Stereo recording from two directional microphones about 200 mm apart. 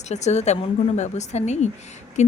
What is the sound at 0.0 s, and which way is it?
Speech, 35° left (ahead or behind).